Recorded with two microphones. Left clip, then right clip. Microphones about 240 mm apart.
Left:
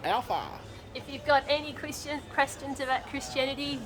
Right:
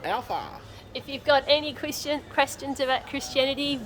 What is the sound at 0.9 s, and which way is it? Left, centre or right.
A woman's voice, right.